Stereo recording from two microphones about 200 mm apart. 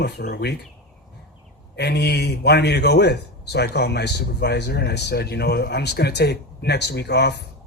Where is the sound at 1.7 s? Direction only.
55° left (ahead or behind).